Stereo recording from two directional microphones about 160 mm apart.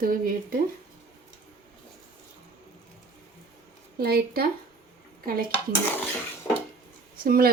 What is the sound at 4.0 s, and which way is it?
Speech, 70° right (ahead or behind).